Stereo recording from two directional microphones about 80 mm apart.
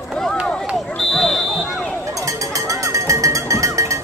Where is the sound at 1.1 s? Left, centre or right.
Centre.